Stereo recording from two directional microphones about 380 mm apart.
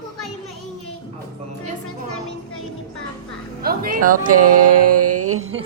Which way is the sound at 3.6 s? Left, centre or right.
Right.